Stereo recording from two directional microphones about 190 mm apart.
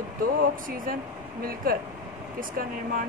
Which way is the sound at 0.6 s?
45° right (ahead or behind).